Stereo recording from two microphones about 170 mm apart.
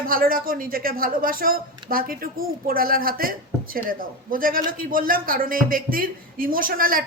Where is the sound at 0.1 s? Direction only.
55° right (ahead or behind).